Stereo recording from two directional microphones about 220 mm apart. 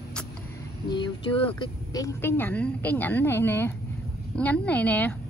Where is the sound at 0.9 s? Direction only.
20° left (ahead or behind).